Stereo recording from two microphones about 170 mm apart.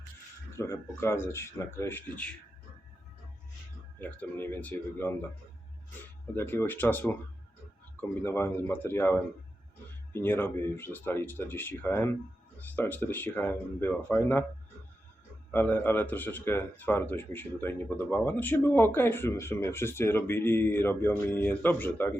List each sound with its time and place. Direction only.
0.5 s speech: 15° left (ahead or behind)
4.0 s speech: 10° left (ahead or behind)
6.3 s speech: 15° left (ahead or behind)
8.2 s speech: 15° left (ahead or behind)
15.5 s speech: 10° left (ahead or behind)